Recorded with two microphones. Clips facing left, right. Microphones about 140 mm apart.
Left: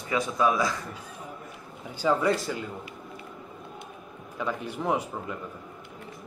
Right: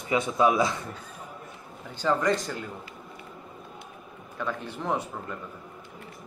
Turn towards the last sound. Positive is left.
turn(degrees=10)  # may be behind; listen again after turning